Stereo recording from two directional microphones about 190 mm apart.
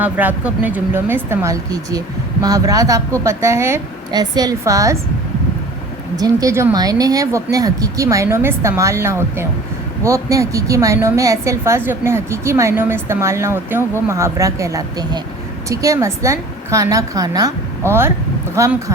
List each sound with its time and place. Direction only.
0.0 s a woman's voice: 10° right (ahead or behind)
6.1 s a woman's voice: 20° right (ahead or behind)